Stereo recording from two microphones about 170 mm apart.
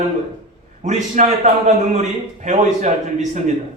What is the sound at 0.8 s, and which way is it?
A man's voice, 45° right (ahead or behind).